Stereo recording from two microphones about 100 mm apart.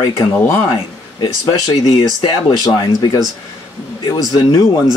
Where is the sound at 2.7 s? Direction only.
45° left (ahead or behind).